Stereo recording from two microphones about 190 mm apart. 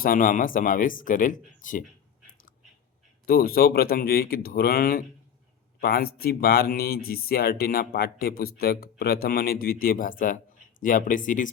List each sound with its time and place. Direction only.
0.0 s speech: 45° left (ahead or behind)
3.2 s speech: 50° left (ahead or behind)